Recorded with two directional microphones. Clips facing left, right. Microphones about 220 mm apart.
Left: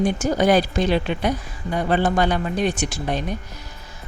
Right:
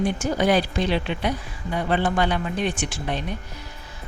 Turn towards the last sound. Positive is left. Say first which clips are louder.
# left 3 dB
turn(degrees=40)  # may be behind; listen again after turning